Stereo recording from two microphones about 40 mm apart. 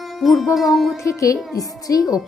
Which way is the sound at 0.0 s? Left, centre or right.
Centre.